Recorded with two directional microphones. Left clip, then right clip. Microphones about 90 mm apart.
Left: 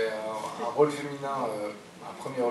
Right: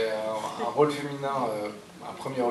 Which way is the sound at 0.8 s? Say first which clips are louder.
Even; 30° right (ahead or behind).